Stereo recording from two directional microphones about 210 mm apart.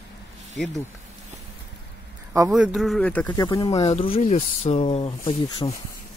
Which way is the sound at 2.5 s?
5° right (ahead or behind).